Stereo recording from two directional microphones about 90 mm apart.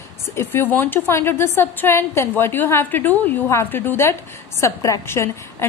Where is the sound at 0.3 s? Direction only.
25° left (ahead or behind).